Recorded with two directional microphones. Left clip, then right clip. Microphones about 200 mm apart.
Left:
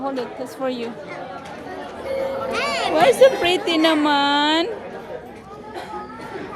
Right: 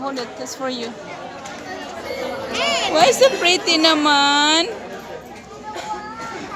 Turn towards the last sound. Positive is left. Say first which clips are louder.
# right 3 dB
turn(degrees=15)  # may be behind; listen again after turning